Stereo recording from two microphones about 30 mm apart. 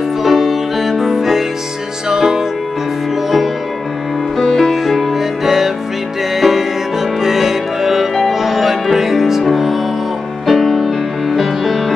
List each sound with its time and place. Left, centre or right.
0.2 s music: centre
4.4 s music: centre